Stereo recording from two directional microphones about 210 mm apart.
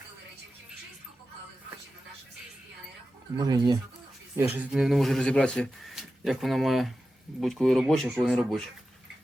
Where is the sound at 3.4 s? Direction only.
20° right (ahead or behind).